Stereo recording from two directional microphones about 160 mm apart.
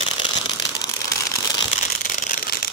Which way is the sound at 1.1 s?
20° left (ahead or behind).